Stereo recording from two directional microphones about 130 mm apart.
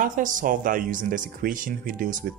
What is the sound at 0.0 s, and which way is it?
Speech, 90° right.